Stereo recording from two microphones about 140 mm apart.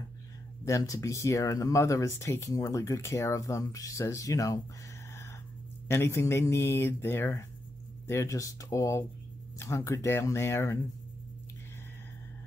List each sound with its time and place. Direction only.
0.7 s speech: 25° left (ahead or behind)
5.9 s speech: 20° left (ahead or behind)